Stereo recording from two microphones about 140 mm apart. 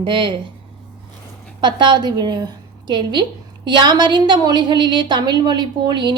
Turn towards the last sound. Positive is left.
turn(degrees=-35)  # may be behind; listen again after turning